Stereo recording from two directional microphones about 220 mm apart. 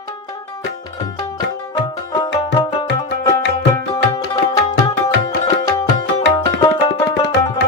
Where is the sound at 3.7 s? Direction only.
20° left (ahead or behind).